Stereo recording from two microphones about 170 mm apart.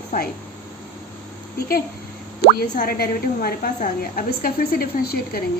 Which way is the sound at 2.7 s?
60° left (ahead or behind).